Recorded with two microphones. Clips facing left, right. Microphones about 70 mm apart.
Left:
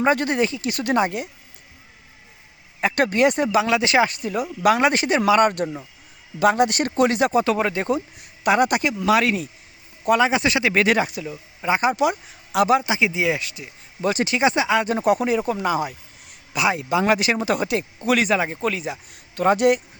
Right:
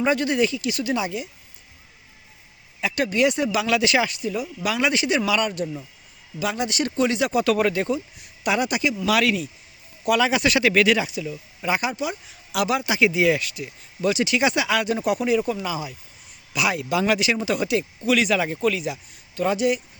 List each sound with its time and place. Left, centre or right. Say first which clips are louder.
0.0 s speech: left 1 dB; left
2.8 s speech: left 3 dB; left
7.4 s speech: right 1 dB; left
7.9 s speech: left 3 dB; left
9.0 s speech: left 3 dB; left
10.8 s speech: left 1 dB; left
14.1 s speech: left 1 dB; left
16.5 s speech: left 2 dB; left
18.3 s speech: right 1 dB; left
19.1 s speech: left 5 dB; left